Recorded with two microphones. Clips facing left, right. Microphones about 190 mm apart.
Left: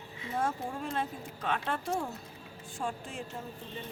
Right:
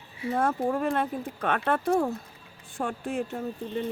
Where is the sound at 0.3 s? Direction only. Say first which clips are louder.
Right 7 dB; 60° right (ahead or behind).